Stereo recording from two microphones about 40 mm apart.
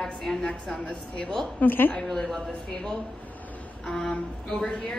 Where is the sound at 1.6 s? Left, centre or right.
Left.